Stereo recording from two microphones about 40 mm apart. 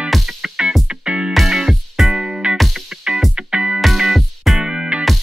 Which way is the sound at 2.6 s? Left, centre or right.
Centre.